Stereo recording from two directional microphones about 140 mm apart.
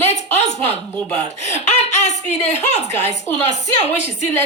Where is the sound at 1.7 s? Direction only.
55° left (ahead or behind).